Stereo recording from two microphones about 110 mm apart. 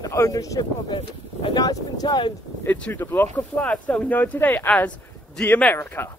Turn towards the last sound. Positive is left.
turn(degrees=20)  # may be behind; listen again after turning